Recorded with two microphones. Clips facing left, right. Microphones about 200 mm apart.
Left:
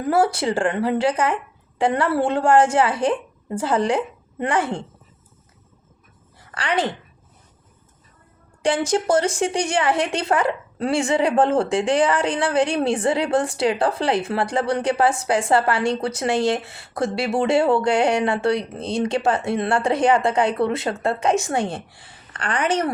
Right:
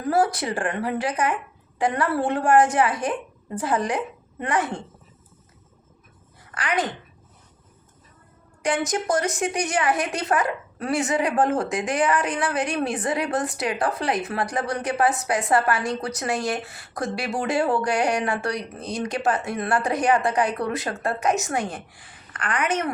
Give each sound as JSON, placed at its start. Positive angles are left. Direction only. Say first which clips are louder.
{"t": 0.0, "sound": "a woman's voice", "louder": "left 3 dB", "side_deg": 25}
{"t": 6.5, "sound": "a woman's voice", "louder": "left 3 dB", "side_deg": 30}
{"t": 8.6, "sound": "a woman's voice", "louder": "left 4 dB", "side_deg": 30}